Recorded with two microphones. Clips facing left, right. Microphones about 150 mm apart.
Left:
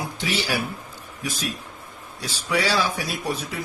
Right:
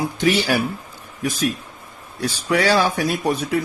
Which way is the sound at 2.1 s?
60° right (ahead or behind).